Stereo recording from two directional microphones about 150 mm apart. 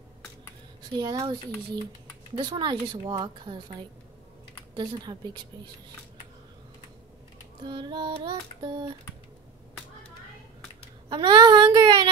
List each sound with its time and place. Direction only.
0.9 s child singing: 30° right (ahead or behind)
2.3 s speech: 30° right (ahead or behind)
4.7 s child singing: 30° right (ahead or behind)
7.6 s child singing: 30° right (ahead or behind)
11.1 s child singing: 30° right (ahead or behind)